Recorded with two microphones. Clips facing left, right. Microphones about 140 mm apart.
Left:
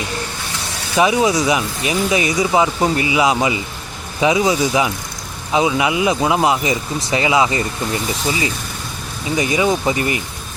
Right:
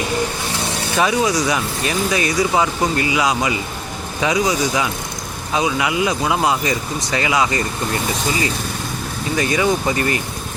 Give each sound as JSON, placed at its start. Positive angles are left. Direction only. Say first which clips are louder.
{"t": 0.9, "sound": "speech", "louder": "left 3 dB", "side_deg": 20}
{"t": 9.3, "sound": "speech", "louder": "left 1 dB", "side_deg": 20}